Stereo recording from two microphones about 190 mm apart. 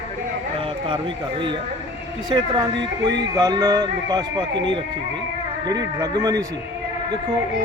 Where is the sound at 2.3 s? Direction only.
20° right (ahead or behind).